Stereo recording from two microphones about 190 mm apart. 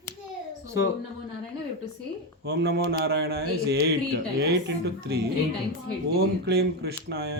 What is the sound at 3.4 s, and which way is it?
Speech, 75° right (ahead or behind).